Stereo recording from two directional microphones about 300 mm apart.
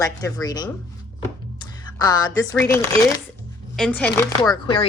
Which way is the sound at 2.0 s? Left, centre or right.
Centre.